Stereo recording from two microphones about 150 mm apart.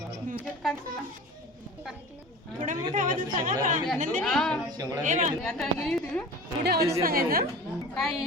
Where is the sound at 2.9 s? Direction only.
60° right (ahead or behind).